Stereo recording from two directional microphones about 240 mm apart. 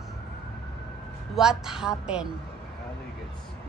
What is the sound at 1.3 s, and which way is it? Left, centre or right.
Speech, centre.